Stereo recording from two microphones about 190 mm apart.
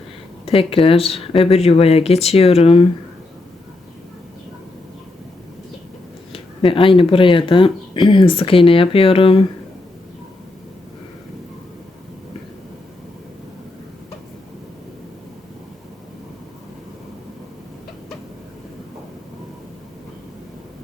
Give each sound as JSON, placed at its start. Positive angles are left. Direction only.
{"t": 0.4, "sound": "speech", "side_deg": 30}
{"t": 6.3, "sound": "speech", "side_deg": 30}